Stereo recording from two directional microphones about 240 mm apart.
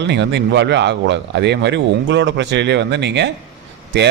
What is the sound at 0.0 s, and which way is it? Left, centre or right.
A man's voice, right.